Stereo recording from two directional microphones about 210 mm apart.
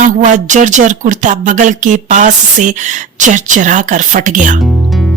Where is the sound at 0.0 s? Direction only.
35° right (ahead or behind).